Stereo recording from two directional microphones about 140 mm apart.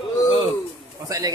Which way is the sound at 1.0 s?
25° right (ahead or behind).